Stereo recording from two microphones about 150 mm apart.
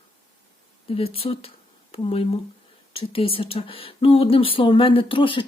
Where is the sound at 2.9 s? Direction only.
40° left (ahead or behind).